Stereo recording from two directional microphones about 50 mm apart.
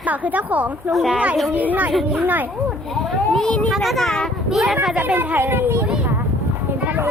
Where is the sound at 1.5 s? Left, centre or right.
Right.